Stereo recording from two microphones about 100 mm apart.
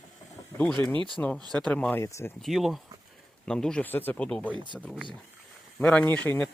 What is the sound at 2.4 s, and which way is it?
Speech, centre (ahead or behind).